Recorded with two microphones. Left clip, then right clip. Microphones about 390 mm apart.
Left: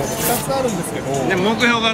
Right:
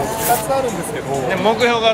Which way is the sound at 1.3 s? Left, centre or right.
Centre.